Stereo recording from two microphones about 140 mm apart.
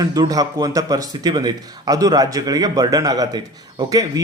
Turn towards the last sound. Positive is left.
turn(degrees=-25)  # may be behind; listen again after turning